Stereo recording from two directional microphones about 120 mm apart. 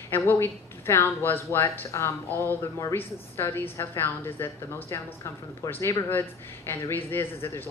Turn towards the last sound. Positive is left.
turn(degrees=20)  # may be behind; listen again after turning